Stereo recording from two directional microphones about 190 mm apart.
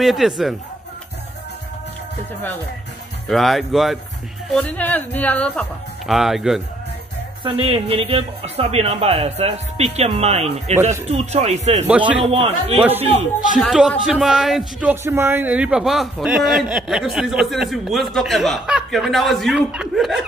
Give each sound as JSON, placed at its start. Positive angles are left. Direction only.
{"t": 0.0, "sound": "speech", "side_deg": 0}
{"t": 3.3, "sound": "speech", "side_deg": 0}
{"t": 7.4, "sound": "speech", "side_deg": -30}
{"t": 11.9, "sound": "a man's voice", "side_deg": -5}
{"t": 12.3, "sound": "speech", "side_deg": -30}
{"t": 13.5, "sound": "speech", "side_deg": 0}